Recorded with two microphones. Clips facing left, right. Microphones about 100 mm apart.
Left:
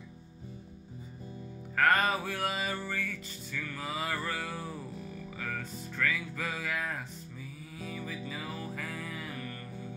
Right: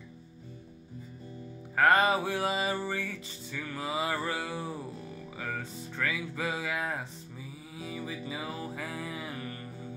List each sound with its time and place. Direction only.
1.8 s music: 15° right (ahead or behind)
5.9 s music: 10° right (ahead or behind)